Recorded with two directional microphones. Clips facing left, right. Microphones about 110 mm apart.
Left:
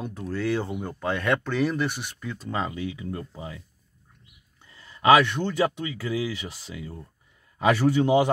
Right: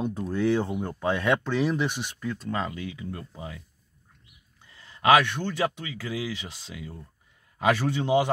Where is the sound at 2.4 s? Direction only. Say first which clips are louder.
Left 4 dB; 10° left (ahead or behind).